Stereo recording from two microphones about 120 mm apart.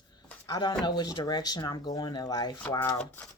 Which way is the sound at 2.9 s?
15° left (ahead or behind).